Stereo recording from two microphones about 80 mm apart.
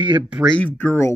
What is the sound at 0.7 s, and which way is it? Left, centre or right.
Speech, left.